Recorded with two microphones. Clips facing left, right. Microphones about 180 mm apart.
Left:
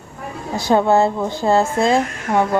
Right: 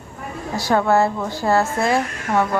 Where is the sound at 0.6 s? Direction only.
20° left (ahead or behind).